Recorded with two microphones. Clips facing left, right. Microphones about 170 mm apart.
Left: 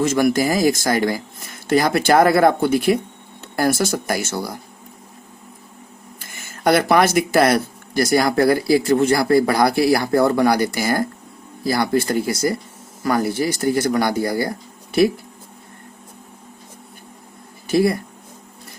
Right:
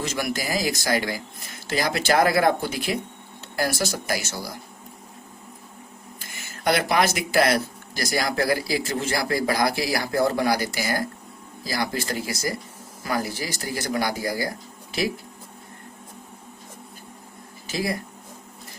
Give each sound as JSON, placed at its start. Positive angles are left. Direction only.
{"t": 0.3, "sound": "speech", "side_deg": 50}
{"t": 6.1, "sound": "speech", "side_deg": 50}
{"t": 17.7, "sound": "speech", "side_deg": 55}